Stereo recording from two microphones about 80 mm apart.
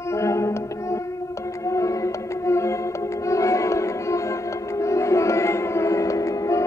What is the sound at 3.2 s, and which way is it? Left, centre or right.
Music, left.